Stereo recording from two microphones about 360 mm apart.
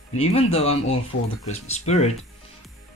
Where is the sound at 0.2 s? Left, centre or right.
Centre.